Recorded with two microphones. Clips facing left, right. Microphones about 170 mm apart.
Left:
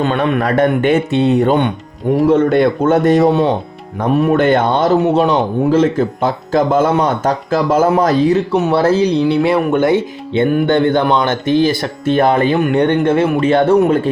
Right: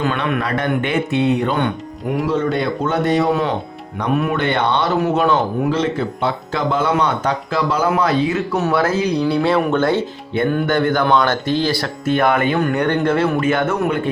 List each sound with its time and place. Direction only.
0.0 s speech: 30° left (ahead or behind)
2.2 s speech: 50° left (ahead or behind)
4.1 s speech: 35° left (ahead or behind)
4.4 s speech: 45° left (ahead or behind)
4.9 s speech: 30° left (ahead or behind)
5.7 s speech: 45° left (ahead or behind)
8.7 s speech: 30° left (ahead or behind)
9.3 s speech: 15° left (ahead or behind); by 14.1 s 35° left (ahead or behind)